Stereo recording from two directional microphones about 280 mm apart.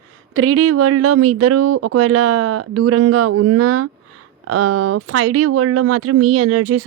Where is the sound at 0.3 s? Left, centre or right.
Right.